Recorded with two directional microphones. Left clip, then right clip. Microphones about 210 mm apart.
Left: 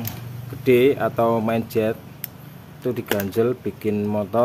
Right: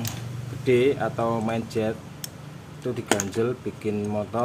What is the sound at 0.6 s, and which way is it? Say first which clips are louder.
Speech: left 4 dB; 45° left (ahead or behind).